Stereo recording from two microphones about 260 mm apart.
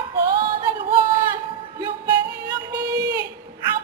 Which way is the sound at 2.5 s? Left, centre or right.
Centre.